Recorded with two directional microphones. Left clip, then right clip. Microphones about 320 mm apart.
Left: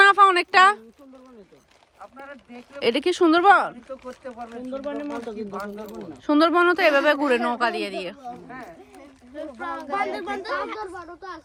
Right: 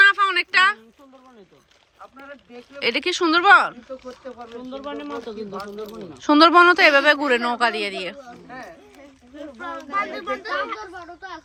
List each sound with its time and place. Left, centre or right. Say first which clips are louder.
0.0 s a sound: left 1 dB; centre
2.0 s speech: even; left
2.8 s speech: left 1 dB; centre
3.8 s speech: right 1 dB; left
6.2 s speech: right 6 dB; centre
9.3 s a child's voice: left 1 dB; centre